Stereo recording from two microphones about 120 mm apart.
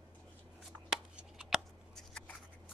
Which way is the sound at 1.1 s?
5° right (ahead or behind).